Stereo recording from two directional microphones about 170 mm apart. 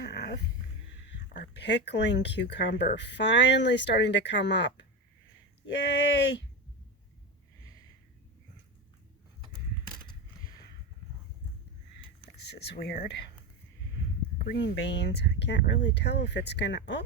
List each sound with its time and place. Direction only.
0.0 s a sound: 90° left
1.6 s speech: 90° left
5.7 s speech: 90° left
12.4 s speech: 75° left (ahead or behind)
14.4 s speech: 80° left